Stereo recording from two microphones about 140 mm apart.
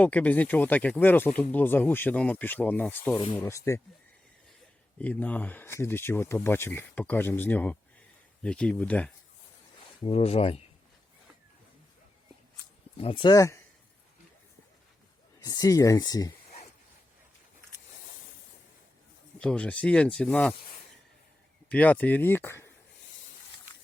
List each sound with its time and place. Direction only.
0.0 s speech: 10° left (ahead or behind)
4.9 s speech: 10° left (ahead or behind)
10.0 s speech: 45° left (ahead or behind)
13.0 s speech: 35° left (ahead or behind)
15.4 s speech: 25° left (ahead or behind)
19.4 s speech: 5° left (ahead or behind)
21.7 s speech: 10° left (ahead or behind)